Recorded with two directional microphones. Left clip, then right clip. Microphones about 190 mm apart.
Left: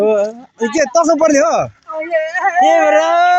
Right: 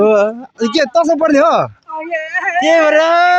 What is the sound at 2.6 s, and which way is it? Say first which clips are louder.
Speech: right 1 dB; 40° right (ahead or behind).